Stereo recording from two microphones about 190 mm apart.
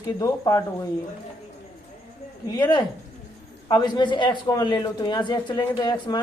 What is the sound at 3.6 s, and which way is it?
A man's voice, 20° left (ahead or behind).